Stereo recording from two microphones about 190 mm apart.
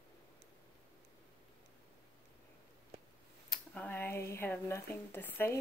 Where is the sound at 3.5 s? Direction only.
5° left (ahead or behind).